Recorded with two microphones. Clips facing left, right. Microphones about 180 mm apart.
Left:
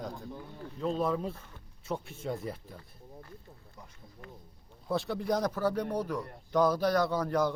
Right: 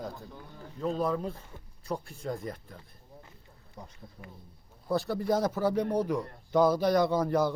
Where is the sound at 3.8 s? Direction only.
35° right (ahead or behind).